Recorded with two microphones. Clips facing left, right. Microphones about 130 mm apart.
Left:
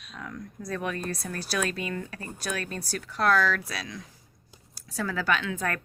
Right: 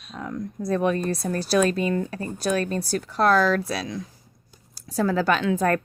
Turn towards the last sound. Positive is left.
turn(degrees=-35)  # may be behind; listen again after turning